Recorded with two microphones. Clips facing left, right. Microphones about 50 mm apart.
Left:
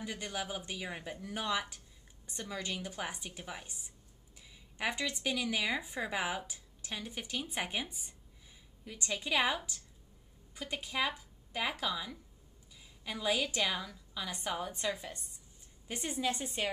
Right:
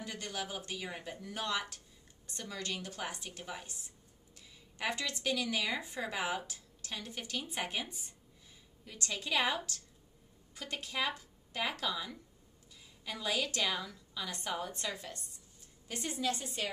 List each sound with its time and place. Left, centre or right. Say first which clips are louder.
0.0 s speech: left 1 dB; centre
15.9 s a woman's voice: left 1 dB; left